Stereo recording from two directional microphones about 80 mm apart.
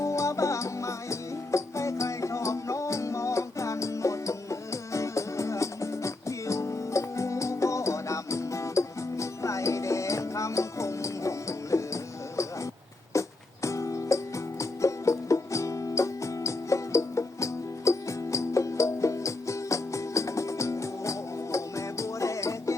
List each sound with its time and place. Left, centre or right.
0.0 s music: left
13.1 s music: left